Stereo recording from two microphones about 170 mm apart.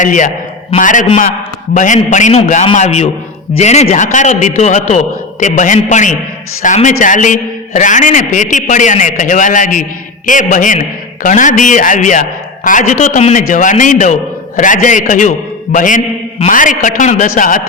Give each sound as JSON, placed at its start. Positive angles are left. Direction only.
{"t": 0.0, "sound": "a man's voice", "side_deg": 50}